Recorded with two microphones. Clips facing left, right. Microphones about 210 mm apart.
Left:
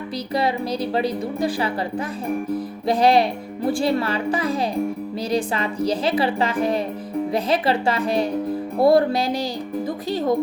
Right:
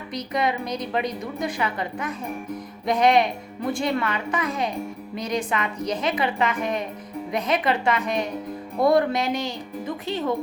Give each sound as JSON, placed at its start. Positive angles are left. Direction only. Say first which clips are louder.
{"t": 0.3, "sound": "speech", "louder": "left 3 dB", "side_deg": 30}